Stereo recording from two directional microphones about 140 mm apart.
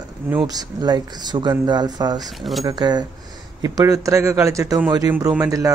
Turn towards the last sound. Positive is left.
turn(degrees=-25)  # may be behind; listen again after turning